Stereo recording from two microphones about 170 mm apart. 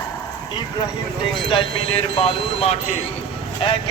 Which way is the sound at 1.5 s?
35° left (ahead or behind).